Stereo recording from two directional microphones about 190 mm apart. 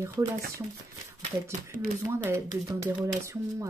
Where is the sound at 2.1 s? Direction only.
15° right (ahead or behind).